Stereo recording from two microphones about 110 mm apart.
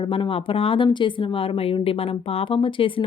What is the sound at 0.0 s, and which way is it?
Speech, 50° left (ahead or behind).